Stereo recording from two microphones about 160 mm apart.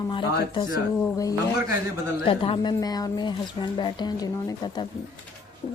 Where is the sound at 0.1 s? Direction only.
30° left (ahead or behind).